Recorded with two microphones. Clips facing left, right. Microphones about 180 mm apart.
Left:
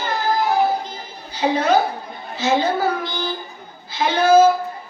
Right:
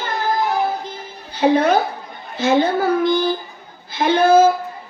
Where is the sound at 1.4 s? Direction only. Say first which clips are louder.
Right 2 dB; 55° right (ahead or behind).